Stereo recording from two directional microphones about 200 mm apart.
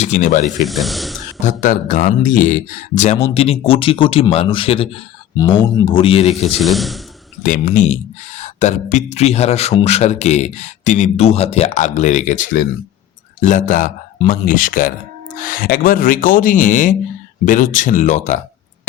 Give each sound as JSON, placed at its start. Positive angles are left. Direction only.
{"t": 0.0, "sound": "speech", "side_deg": 40}
{"t": 0.6, "sound": "speech", "side_deg": 0}
{"t": 1.5, "sound": "speech", "side_deg": 40}
{"t": 6.5, "sound": "a man's voice", "side_deg": 0}
{"t": 7.4, "sound": "speech", "side_deg": 40}